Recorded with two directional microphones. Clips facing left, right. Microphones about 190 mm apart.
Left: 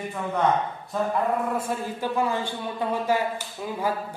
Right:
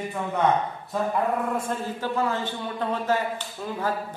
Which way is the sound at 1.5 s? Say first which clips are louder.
Even; 10° left (ahead or behind).